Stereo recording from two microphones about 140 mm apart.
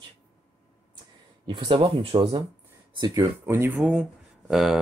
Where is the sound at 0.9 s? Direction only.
35° right (ahead or behind).